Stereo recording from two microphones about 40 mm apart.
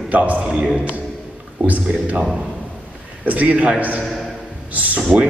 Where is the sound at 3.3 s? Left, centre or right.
Right.